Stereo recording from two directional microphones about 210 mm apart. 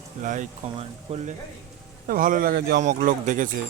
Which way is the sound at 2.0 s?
40° right (ahead or behind).